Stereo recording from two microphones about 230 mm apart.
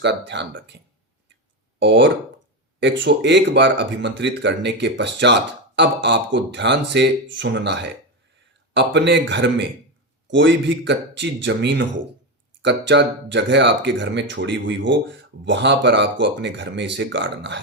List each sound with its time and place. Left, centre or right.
0.0 s speech: right
1.8 s speech: right